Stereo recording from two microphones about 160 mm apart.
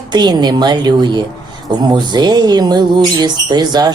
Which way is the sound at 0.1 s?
25° right (ahead or behind).